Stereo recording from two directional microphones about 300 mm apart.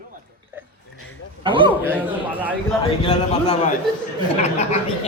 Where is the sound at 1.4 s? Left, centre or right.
Centre.